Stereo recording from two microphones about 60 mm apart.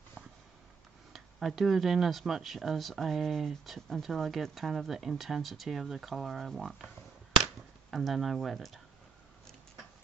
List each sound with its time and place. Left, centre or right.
1.1 s speech: centre
7.9 s speech: centre